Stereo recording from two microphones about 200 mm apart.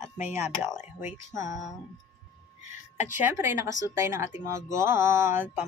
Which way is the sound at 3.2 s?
10° right (ahead or behind).